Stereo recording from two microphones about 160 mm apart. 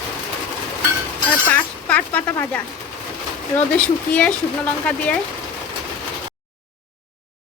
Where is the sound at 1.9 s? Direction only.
10° left (ahead or behind).